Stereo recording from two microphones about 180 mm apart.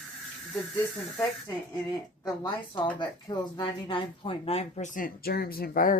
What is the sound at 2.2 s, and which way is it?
A woman's voice, 20° left (ahead or behind).